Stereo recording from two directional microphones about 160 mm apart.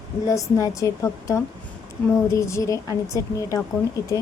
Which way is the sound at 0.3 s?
20° left (ahead or behind).